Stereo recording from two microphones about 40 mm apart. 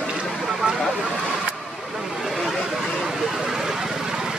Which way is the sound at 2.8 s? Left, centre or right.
Centre.